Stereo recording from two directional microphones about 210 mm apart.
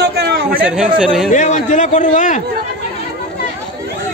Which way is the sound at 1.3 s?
35° left (ahead or behind).